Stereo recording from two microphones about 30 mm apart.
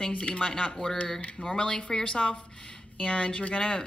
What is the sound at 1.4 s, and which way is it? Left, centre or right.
Speech, left.